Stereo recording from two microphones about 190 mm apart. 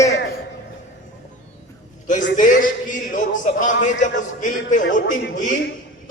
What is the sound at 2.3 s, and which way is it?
A man's voice, 45° left (ahead or behind).